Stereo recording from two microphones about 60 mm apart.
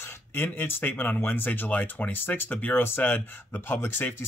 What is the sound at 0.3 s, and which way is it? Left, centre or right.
Speech, left.